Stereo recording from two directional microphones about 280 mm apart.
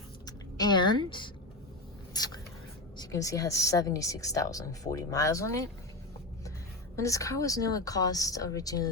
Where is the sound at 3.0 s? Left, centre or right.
Centre.